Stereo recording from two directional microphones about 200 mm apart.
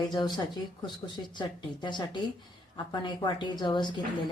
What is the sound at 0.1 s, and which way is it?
Speech, 20° left (ahead or behind).